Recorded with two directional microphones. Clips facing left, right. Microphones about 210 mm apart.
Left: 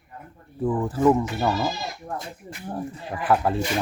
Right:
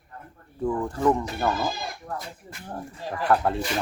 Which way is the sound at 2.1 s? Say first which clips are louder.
Left 2 dB; 25° left (ahead or behind).